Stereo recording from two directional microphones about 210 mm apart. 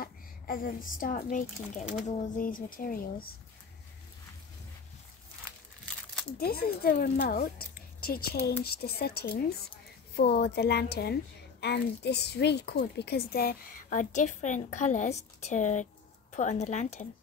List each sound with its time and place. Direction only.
0.0 s a woman's voice: 45° left (ahead or behind)
6.3 s a woman's voice: 45° left (ahead or behind)